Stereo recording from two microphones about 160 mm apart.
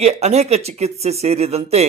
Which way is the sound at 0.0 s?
45° right (ahead or behind).